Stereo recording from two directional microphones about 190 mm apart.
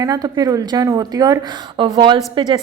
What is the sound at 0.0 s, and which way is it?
A woman's voice, 20° right (ahead or behind).